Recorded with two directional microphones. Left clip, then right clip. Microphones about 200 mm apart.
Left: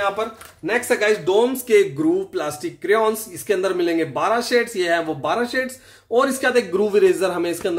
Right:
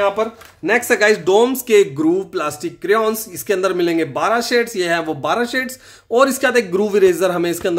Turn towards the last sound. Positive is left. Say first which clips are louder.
# right 4 dB
turn(degrees=-35)  # may be behind; listen again after turning